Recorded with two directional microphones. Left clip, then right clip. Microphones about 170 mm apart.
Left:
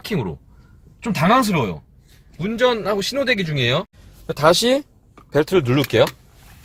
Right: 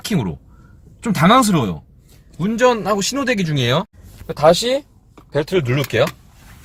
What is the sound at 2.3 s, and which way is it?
Speech, 10° right (ahead or behind).